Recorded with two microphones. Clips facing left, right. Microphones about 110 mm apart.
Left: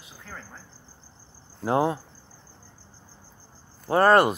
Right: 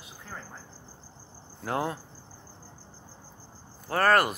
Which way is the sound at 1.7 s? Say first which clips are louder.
Left 7 dB; 25° left (ahead or behind).